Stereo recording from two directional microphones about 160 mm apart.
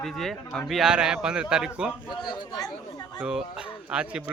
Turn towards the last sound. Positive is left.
turn(degrees=-5)  # may be behind; listen again after turning